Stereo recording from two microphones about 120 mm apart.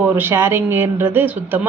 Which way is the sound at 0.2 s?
20° right (ahead or behind).